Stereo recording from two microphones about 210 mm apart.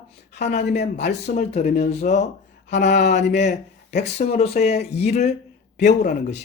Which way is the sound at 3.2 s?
50° left (ahead or behind).